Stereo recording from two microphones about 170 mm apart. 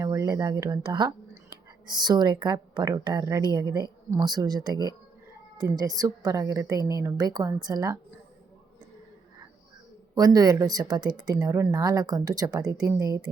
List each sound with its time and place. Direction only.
0.0 s speech: 20° right (ahead or behind)
10.2 s speech: 20° right (ahead or behind)